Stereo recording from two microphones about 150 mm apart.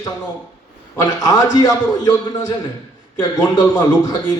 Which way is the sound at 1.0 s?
25° left (ahead or behind).